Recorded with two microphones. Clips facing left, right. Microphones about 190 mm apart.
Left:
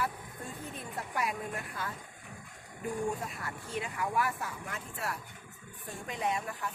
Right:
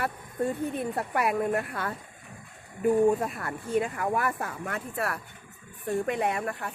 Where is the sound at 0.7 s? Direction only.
60° right (ahead or behind).